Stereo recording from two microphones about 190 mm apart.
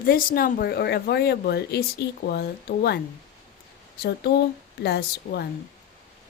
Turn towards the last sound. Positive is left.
turn(degrees=60)  # may be behind; listen again after turning